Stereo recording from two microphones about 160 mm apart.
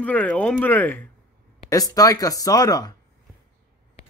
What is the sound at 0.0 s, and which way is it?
Speech, 10° left (ahead or behind).